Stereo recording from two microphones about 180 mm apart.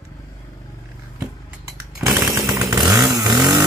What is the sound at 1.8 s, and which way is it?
Chainsaw, 15° right (ahead or behind).